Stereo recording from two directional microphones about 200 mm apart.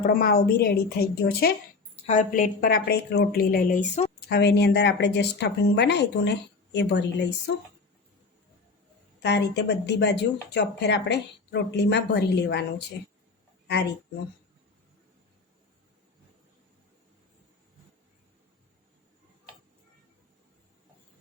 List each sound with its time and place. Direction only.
0.0 s a woman's voice: 45° left (ahead or behind)
2.0 s a woman's voice: 35° left (ahead or behind)
4.3 s speech: 55° left (ahead or behind)
9.2 s speech: 60° left (ahead or behind)